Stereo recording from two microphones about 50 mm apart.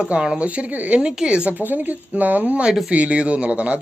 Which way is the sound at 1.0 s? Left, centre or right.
Centre.